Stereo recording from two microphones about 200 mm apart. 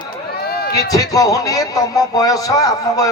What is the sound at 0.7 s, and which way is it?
Music, 15° left (ahead or behind).